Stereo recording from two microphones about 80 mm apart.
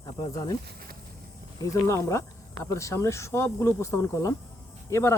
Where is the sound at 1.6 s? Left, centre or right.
Left.